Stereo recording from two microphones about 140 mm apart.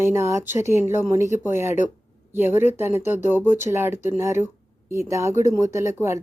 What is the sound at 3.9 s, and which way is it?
Speech, 60° left (ahead or behind).